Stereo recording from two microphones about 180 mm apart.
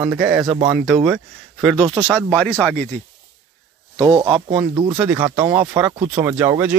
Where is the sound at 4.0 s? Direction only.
20° right (ahead or behind).